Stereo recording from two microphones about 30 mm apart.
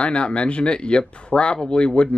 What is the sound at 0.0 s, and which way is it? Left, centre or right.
Speech, left.